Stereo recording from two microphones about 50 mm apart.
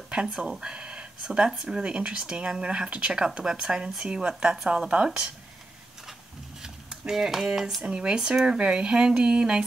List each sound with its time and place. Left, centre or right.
0.6 s speech: centre
6.6 s a sound: centre
7.8 s speech: right